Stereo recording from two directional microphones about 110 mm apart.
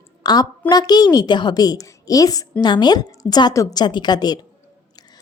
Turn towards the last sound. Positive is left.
turn(degrees=40)  # may be behind; listen again after turning